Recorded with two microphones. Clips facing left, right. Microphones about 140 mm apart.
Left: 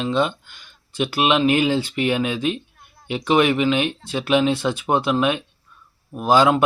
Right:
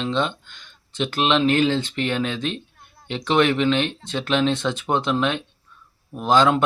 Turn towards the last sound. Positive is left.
turn(degrees=10)  # may be behind; listen again after turning